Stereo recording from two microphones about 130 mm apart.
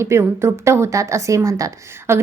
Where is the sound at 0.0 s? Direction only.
20° right (ahead or behind).